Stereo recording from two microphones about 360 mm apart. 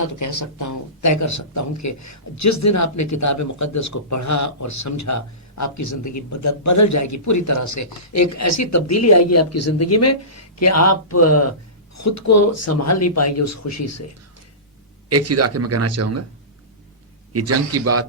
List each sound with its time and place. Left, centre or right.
0.1 s speech: left
15.1 s speech: right
17.3 s speech: right